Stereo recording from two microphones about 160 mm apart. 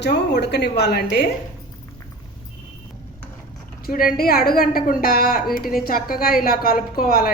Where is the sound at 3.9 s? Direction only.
65° left (ahead or behind).